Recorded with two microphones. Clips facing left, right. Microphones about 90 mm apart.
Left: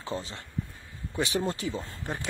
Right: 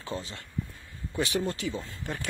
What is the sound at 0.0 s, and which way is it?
A woman's voice, 25° left (ahead or behind).